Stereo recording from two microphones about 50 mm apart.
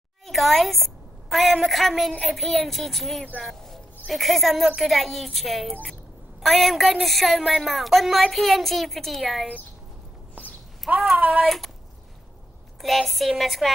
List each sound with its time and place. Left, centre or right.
0.3 s a woman's voice: centre
11.1 s a sound: right
11.4 s a woman's voice: centre
12.8 s a woman's voice: centre